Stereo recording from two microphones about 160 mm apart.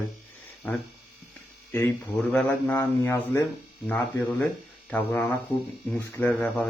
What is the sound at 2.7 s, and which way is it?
Speech, 20° left (ahead or behind).